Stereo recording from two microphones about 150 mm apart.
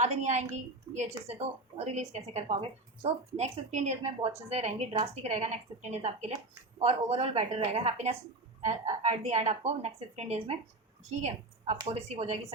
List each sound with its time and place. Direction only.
0.0 s a woman's voice: 50° right (ahead or behind)